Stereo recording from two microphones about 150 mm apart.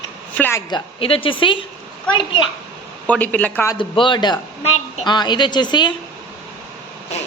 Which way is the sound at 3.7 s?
35° left (ahead or behind).